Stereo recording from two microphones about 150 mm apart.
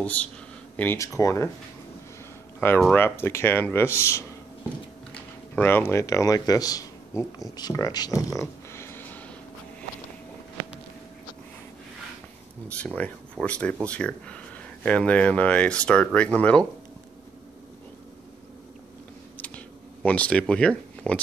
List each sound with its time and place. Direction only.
0.0 s speech: 10° left (ahead or behind)
2.6 s speech: 15° left (ahead or behind)
12.6 s speech: 10° left (ahead or behind)
19.3 s a sound: 10° left (ahead or behind)